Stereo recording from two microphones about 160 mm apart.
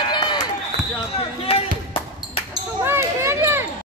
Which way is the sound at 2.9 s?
15° right (ahead or behind).